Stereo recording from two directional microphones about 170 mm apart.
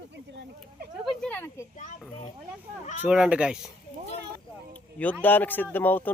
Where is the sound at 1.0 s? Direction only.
5° left (ahead or behind).